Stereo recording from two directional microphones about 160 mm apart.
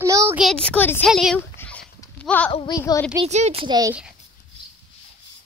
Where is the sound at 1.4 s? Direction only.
10° left (ahead or behind).